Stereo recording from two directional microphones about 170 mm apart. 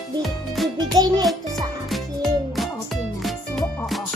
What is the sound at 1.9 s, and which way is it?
Music, centre (ahead or behind).